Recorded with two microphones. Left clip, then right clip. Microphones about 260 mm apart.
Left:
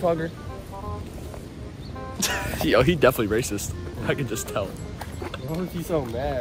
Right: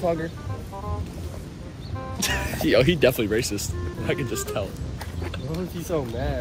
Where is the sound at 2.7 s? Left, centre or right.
Left; by 4.6 s centre.